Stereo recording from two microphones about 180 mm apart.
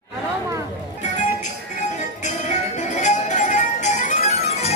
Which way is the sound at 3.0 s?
40° left (ahead or behind).